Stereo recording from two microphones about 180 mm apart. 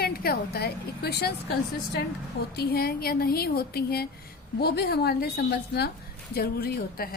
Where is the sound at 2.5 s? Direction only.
60° left (ahead or behind).